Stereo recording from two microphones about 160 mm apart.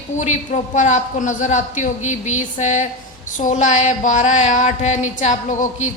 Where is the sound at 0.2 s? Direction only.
50° left (ahead or behind).